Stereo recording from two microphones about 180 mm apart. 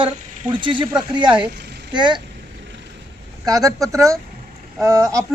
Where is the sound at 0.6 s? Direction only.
25° right (ahead or behind).